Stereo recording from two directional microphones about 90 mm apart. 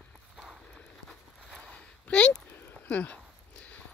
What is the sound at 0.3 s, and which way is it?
Clip-clop, 5° right (ahead or behind).